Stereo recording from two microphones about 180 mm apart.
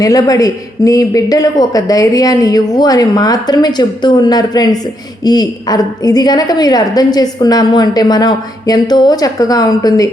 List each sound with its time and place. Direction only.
0.0 s a woman's voice: 20° left (ahead or behind)